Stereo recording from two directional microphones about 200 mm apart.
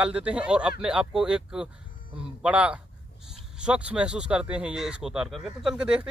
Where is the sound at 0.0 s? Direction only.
5° right (ahead or behind).